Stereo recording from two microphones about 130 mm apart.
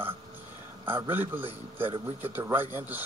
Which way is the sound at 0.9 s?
15° right (ahead or behind).